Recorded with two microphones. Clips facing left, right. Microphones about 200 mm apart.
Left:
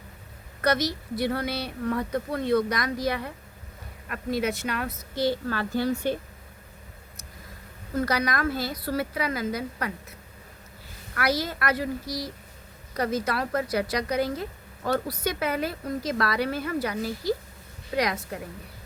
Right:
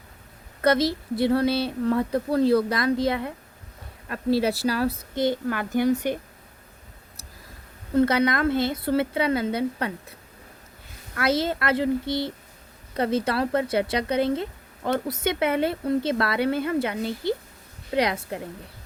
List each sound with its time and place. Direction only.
0.6 s speech: 25° right (ahead or behind)
5.1 s a woman's voice: 20° right (ahead or behind)
7.9 s speech: 25° right (ahead or behind)